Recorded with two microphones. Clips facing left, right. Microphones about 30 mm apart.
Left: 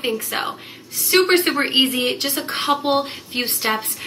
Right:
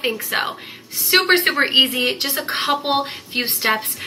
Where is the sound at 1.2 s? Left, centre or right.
Right.